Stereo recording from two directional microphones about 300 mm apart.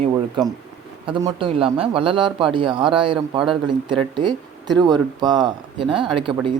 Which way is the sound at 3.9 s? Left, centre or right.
Centre.